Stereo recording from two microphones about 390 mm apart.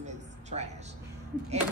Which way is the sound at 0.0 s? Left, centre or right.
Centre.